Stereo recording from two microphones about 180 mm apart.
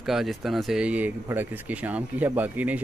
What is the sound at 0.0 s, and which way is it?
A man's voice, centre (ahead or behind).